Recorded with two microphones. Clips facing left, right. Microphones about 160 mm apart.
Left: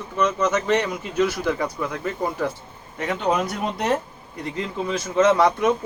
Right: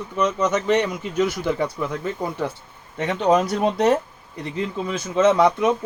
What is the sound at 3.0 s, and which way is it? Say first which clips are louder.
Speech: right 4 dB; 30° right (ahead or behind).